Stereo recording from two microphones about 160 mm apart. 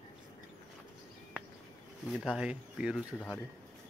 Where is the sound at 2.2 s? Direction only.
5° right (ahead or behind).